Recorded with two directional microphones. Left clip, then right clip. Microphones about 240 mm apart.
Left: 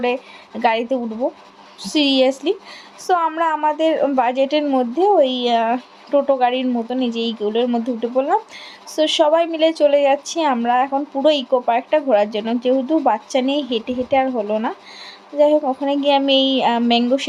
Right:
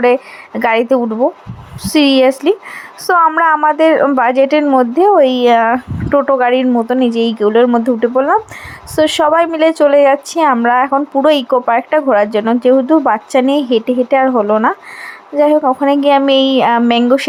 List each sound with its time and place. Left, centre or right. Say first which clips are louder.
0.0 s a woman's voice: right 10 dB; centre
1.8 s a woman's voice: right 7 dB; centre
2.4 s a woman's voice: right 8 dB; right
3.1 s a woman's voice: right 8 dB; centre
13.5 s a woman's voice: right 8 dB; right
13.8 s a woman's voice: right 7 dB; centre